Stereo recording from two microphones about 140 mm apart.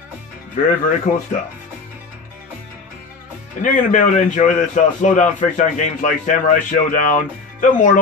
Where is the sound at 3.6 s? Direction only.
65° left (ahead or behind).